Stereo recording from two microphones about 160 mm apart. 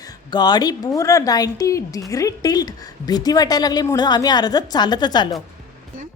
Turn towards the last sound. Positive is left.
turn(degrees=25)  # may be behind; listen again after turning